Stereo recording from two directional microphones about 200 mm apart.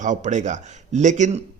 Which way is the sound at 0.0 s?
40° right (ahead or behind).